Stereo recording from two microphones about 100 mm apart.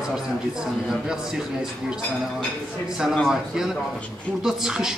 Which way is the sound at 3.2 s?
5° right (ahead or behind).